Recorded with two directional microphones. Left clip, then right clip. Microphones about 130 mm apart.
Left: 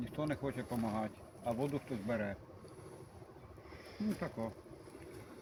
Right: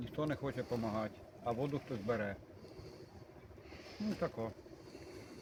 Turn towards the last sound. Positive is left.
turn(degrees=-25)  # may be behind; listen again after turning